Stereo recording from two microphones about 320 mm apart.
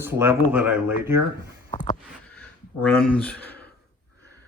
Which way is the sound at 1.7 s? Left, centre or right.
Left.